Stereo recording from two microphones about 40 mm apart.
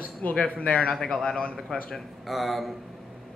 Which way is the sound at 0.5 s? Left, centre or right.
Left.